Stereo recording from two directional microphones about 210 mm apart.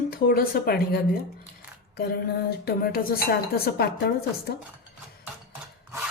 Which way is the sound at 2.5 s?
45° left (ahead or behind).